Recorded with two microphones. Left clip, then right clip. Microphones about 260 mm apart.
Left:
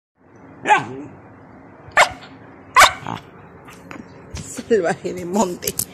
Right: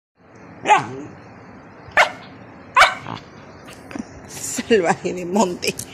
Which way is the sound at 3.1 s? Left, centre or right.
Centre.